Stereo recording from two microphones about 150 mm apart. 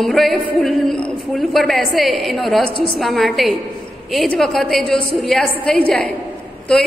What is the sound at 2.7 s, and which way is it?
Speech, 35° left (ahead or behind).